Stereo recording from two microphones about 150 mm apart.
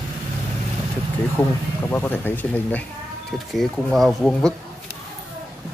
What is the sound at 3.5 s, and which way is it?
Speech, centre (ahead or behind).